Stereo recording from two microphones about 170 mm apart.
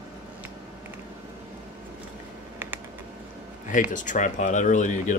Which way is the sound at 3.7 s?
50° left (ahead or behind).